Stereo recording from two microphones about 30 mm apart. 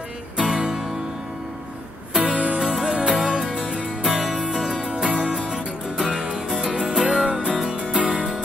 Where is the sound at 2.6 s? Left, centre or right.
Centre.